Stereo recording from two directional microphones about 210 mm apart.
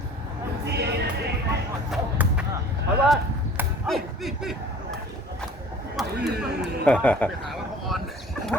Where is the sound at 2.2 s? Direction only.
10° right (ahead or behind).